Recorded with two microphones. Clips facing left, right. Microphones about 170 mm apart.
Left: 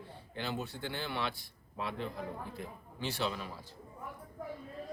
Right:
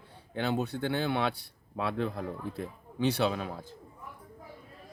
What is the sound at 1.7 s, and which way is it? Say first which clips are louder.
Speech: right 7 dB; 70° right (ahead or behind).